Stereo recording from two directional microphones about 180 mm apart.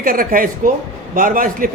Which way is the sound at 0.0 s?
50° right (ahead or behind).